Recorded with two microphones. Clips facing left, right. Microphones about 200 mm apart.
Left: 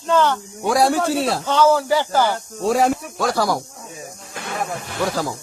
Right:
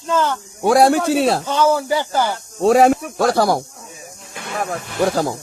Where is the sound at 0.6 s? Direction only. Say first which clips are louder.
Right 4 dB; 60° right (ahead or behind).